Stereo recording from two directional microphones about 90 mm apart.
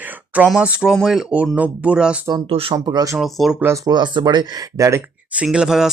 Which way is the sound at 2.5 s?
90° right.